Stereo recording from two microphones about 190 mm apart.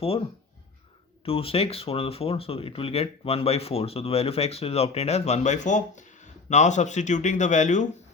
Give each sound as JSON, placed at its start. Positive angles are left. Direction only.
{"t": 1.2, "sound": "speech", "side_deg": 30}